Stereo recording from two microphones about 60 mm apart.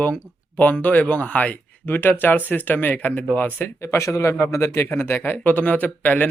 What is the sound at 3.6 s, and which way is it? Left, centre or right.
Speech, left.